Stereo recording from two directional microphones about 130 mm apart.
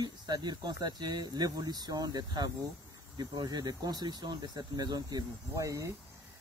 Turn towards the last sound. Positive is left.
turn(degrees=-25)  # may be behind; listen again after turning